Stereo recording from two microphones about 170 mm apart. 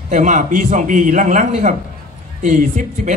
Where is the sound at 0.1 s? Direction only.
50° right (ahead or behind).